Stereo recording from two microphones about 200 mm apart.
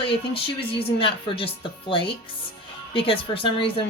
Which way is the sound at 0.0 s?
25° left (ahead or behind).